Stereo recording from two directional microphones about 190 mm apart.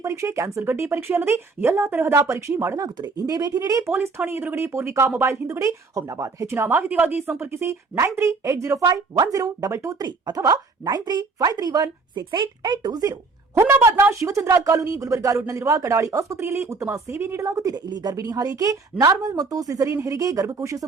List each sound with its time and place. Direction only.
0.0 s speech: 15° right (ahead or behind)